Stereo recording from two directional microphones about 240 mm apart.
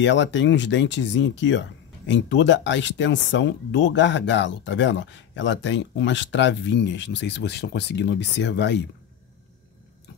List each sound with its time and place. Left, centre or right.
0.0 s speech: left